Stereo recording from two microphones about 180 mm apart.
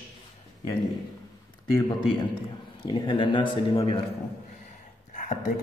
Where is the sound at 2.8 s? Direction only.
30° left (ahead or behind).